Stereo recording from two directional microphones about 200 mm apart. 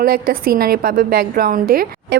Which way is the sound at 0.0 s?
45° right (ahead or behind).